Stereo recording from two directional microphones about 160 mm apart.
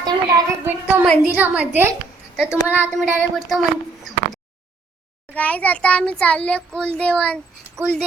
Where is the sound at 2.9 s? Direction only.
Centre (ahead or behind).